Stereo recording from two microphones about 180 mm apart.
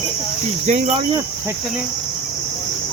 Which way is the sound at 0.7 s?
40° right (ahead or behind).